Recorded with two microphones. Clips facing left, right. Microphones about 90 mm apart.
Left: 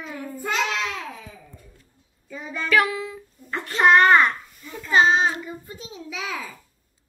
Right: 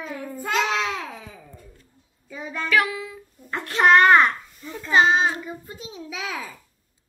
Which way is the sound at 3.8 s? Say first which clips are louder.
Right 1 dB; centre (ahead or behind).